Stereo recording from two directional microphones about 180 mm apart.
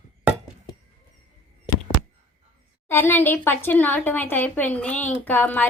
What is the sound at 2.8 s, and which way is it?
Speech, 10° left (ahead or behind).